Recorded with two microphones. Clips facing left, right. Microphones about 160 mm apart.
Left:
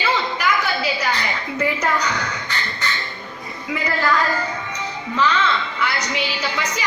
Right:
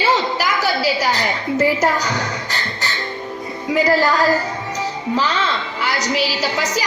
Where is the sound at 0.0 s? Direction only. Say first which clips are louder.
Right 4 dB; 40° right (ahead or behind).